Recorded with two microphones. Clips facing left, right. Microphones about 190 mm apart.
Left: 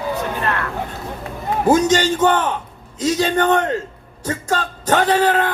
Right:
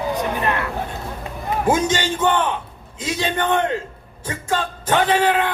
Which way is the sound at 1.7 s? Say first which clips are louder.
Left 5 dB; 40° left (ahead or behind).